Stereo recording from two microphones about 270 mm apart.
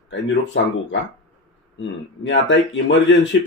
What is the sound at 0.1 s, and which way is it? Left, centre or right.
Speech, left.